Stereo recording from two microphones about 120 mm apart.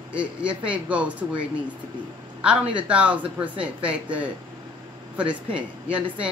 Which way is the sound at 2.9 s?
10° right (ahead or behind).